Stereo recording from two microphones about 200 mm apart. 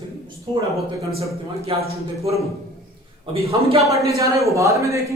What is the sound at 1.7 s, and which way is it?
Speech, 30° right (ahead or behind).